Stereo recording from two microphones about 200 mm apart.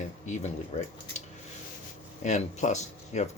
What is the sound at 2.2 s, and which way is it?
Speech, 35° left (ahead or behind).